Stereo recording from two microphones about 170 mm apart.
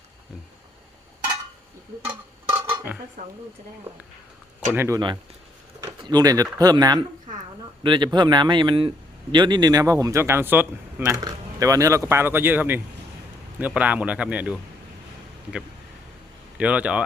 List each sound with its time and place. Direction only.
2.0 s a sound: 10° right (ahead or behind)
4.7 s a man's voice: 15° right (ahead or behind)
6.0 s a man's voice: 25° right (ahead or behind); by 14.6 s 5° right (ahead or behind)
16.6 s a man's voice: 5° right (ahead or behind)